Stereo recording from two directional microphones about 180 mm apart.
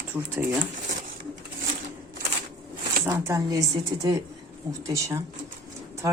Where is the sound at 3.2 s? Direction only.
20° right (ahead or behind).